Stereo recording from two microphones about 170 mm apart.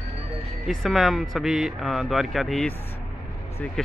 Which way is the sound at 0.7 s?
Centre (ahead or behind).